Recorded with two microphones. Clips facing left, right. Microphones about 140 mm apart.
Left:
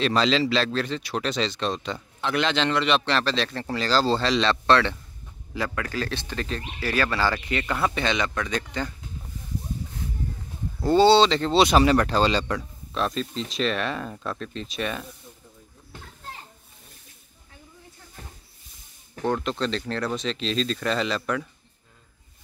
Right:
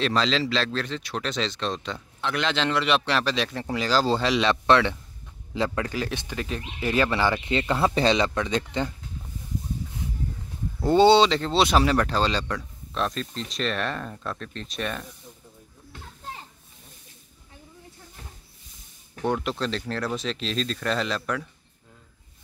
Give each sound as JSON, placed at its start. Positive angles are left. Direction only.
{"t": 0.0, "sound": "a man's voice", "side_deg": 5}
{"t": 10.8, "sound": "speech", "side_deg": -20}
{"t": 11.2, "sound": "a man's voice", "side_deg": 0}
{"t": 19.2, "sound": "a man's voice", "side_deg": -5}